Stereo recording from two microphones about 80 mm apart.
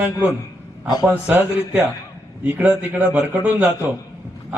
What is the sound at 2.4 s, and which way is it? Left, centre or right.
A man's voice, centre.